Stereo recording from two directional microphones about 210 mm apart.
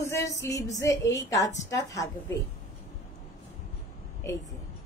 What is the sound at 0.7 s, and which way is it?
A woman's voice, 15° left (ahead or behind).